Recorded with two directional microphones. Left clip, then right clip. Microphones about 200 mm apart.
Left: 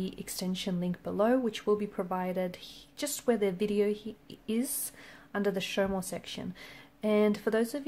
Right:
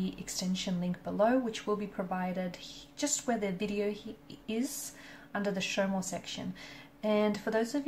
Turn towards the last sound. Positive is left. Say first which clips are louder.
# left 2 dB
turn(degrees=50)  # may be behind; listen again after turning